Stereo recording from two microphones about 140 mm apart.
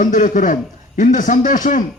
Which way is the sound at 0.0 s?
70° left (ahead or behind).